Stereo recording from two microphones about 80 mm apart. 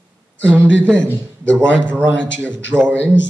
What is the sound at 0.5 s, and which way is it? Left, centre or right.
Speech, right.